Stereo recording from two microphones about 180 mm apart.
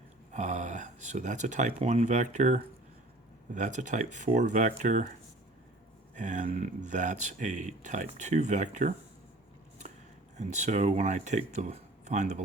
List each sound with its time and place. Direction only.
0.3 s speech: 40° right (ahead or behind)
6.1 s speech: 45° right (ahead or behind)
10.3 s speech: 40° right (ahead or behind)